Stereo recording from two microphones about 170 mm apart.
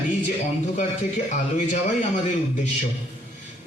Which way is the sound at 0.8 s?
45° left (ahead or behind).